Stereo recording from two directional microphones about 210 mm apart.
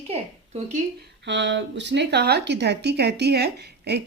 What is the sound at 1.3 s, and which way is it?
A woman's voice, 55° right (ahead or behind).